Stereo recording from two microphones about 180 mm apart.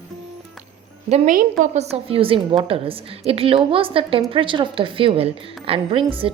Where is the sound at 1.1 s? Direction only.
45° right (ahead or behind).